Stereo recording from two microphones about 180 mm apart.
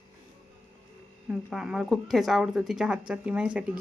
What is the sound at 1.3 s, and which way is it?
A child's voice, 5° right (ahead or behind).